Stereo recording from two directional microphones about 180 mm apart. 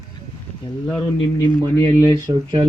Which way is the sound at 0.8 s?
10° left (ahead or behind).